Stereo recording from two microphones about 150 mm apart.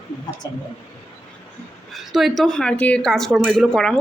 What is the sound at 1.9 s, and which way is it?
Speech, centre (ahead or behind).